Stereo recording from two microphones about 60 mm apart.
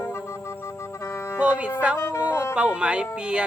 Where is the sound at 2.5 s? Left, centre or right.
Centre.